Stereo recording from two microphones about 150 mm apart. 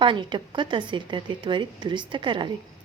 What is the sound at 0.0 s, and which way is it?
A woman's voice, 30° right (ahead or behind).